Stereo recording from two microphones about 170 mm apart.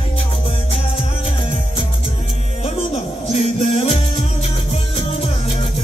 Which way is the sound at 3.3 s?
35° left (ahead or behind).